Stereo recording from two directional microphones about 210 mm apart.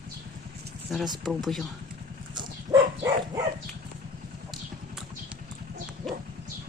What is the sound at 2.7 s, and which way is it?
Dog, 20° right (ahead or behind).